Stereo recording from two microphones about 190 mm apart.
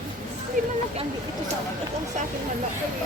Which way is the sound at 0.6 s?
45° right (ahead or behind).